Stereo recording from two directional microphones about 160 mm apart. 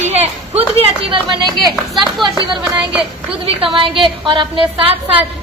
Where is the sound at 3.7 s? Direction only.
30° right (ahead or behind).